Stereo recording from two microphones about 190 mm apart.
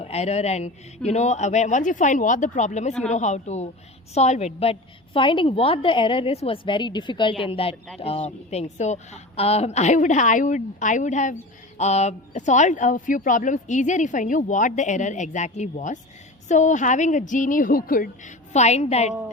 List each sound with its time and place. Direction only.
0.0 s a woman's voice: 35° left (ahead or behind)